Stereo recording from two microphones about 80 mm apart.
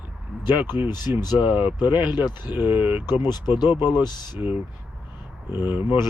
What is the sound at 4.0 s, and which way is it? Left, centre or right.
Speech, left.